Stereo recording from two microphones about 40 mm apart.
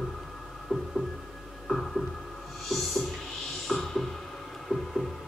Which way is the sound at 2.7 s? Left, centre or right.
Centre.